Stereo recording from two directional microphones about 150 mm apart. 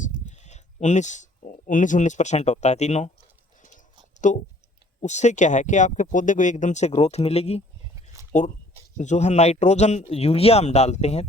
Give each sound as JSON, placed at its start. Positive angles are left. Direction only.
{"t": 0.3, "sound": "speech", "side_deg": 50}
{"t": 4.2, "sound": "speech", "side_deg": 55}